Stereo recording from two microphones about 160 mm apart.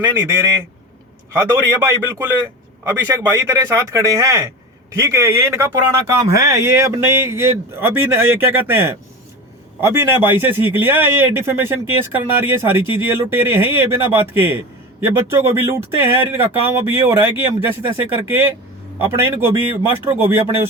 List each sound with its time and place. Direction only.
0.0 s speech: 15° right (ahead or behind)
18.9 s speech: 15° right (ahead or behind)